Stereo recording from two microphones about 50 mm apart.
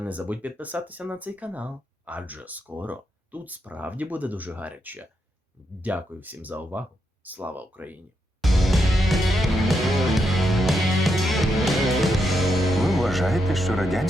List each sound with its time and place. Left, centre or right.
0.0 s speech: right
8.4 s music: centre